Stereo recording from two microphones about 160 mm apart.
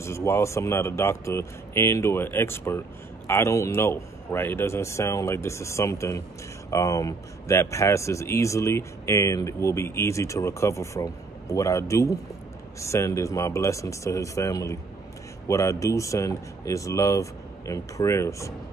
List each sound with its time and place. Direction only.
0.0 s speech: 15° left (ahead or behind)